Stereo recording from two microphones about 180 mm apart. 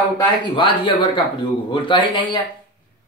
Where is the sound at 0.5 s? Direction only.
25° left (ahead or behind).